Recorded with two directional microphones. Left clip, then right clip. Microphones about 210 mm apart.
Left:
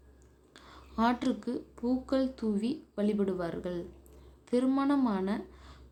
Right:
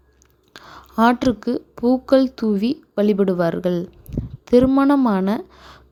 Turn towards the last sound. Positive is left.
turn(degrees=-40)  # may be behind; listen again after turning